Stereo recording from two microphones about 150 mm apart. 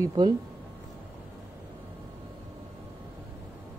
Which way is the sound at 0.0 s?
25° right (ahead or behind).